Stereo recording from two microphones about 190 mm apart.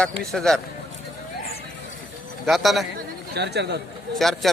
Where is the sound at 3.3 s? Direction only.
60° right (ahead or behind).